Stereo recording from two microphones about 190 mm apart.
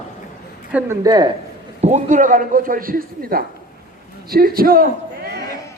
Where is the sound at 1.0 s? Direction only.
20° right (ahead or behind).